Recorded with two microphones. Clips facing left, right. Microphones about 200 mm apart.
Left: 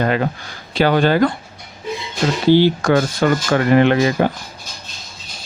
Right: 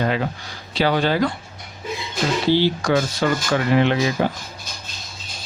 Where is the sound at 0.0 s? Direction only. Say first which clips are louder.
Left 4 dB; 55° left (ahead or behind).